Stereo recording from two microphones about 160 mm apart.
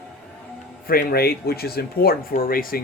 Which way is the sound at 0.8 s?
70° left (ahead or behind).